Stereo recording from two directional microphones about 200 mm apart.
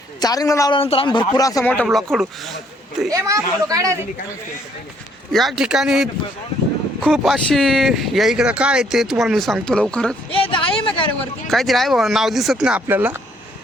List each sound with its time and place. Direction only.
0.2 s a woman's voice: 20° left (ahead or behind)
0.8 s speech: 25° left (ahead or behind)
1.7 s speech: centre (ahead or behind)
3.1 s speech: 15° right (ahead or behind)
5.3 s speech: centre (ahead or behind)
10.3 s speech: 25° left (ahead or behind)
11.4 s speech: centre (ahead or behind)